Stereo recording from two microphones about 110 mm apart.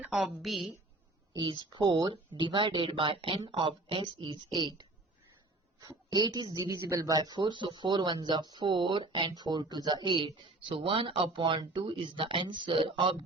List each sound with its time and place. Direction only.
0.0 s a woman's voice: 5° right (ahead or behind)
1.3 s a woman's voice: 45° right (ahead or behind)
5.8 s a woman's voice: 35° right (ahead or behind)